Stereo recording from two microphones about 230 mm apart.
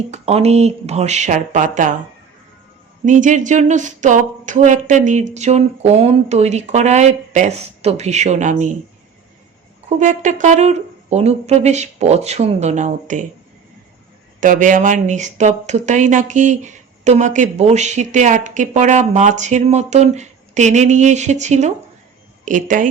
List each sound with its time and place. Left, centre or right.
0.1 s speech: right
3.1 s speech: right
10.0 s speech: right
14.4 s speech: right